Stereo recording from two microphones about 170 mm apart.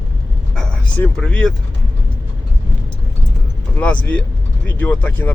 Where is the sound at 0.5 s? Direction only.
5° left (ahead or behind).